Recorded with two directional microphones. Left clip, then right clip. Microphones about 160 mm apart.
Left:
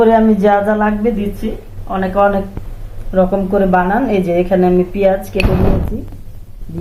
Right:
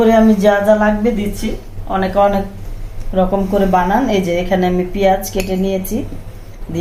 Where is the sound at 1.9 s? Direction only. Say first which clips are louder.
Even; 20° left (ahead or behind).